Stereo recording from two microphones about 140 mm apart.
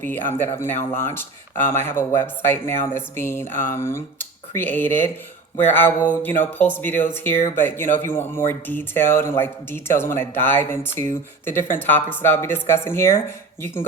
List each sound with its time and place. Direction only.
0.0 s speech: 15° left (ahead or behind)